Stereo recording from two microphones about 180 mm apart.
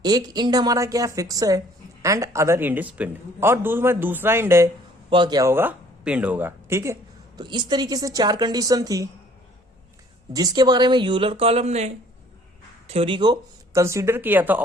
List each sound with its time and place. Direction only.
0.0 s a woman's voice: 20° right (ahead or behind)
5.1 s speech: 25° right (ahead or behind)
10.3 s speech: 20° right (ahead or behind); by 11.9 s 35° right (ahead or behind)
12.9 s a woman's voice: 30° right (ahead or behind); by 14.6 s 10° right (ahead or behind)